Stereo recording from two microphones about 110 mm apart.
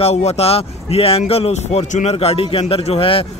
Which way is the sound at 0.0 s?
75° left (ahead or behind).